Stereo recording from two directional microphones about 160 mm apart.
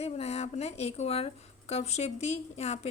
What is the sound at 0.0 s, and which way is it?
A woman's voice, 40° left (ahead or behind).